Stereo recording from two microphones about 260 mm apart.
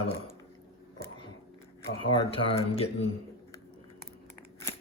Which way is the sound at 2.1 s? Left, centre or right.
Left.